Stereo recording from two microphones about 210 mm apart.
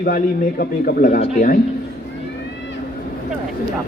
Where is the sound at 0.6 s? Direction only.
40° left (ahead or behind).